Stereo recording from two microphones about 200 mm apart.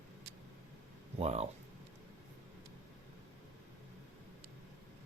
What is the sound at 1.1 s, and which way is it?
Speech, 30° right (ahead or behind).